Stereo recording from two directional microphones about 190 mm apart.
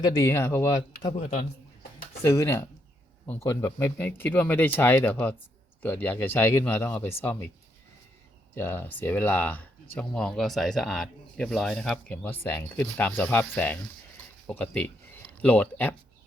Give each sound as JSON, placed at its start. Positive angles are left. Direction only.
{"t": 0.0, "sound": "speech", "side_deg": 15}
{"t": 1.1, "sound": "speech", "side_deg": 35}
{"t": 2.2, "sound": "speech", "side_deg": 15}
{"t": 8.5, "sound": "speech", "side_deg": 10}